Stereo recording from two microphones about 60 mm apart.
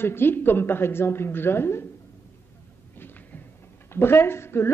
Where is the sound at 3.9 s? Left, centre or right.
Left.